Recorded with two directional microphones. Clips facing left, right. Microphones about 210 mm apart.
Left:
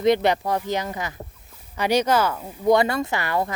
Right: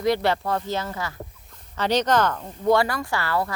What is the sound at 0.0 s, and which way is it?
Speech, 20° left (ahead or behind).